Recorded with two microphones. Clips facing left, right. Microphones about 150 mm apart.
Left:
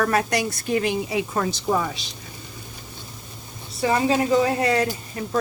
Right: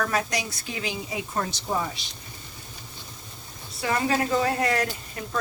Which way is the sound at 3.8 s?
25° left (ahead or behind).